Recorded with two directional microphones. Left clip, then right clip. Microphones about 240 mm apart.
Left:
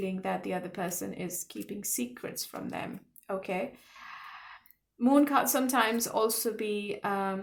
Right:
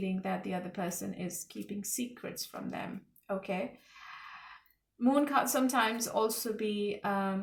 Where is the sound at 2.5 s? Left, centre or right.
Left.